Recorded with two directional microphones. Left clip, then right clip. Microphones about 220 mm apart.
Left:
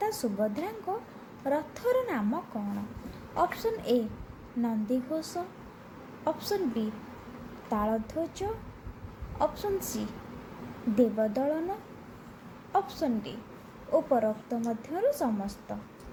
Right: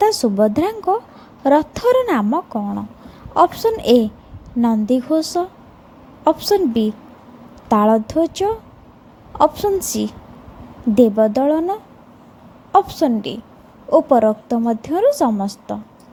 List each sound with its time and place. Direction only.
0.0 s a woman's voice: 35° right (ahead or behind)
12.7 s a woman's voice: 35° right (ahead or behind)